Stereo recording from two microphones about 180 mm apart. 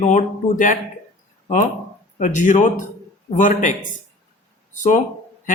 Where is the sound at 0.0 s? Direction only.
45° left (ahead or behind).